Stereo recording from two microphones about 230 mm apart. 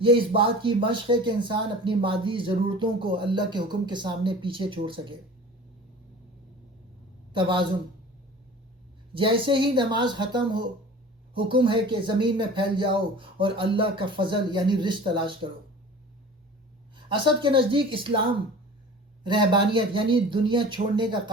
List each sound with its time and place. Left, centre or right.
0.0 s speech: right
7.3 s speech: right
9.1 s speech: right
17.1 s speech: right